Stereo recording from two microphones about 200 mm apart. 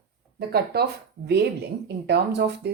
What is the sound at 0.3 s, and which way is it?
Speech, 50° right (ahead or behind).